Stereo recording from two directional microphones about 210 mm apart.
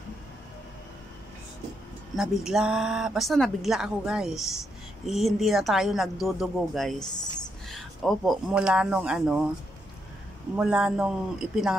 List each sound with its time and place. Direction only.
2.1 s speech: centre (ahead or behind)
10.5 s speech: 5° right (ahead or behind)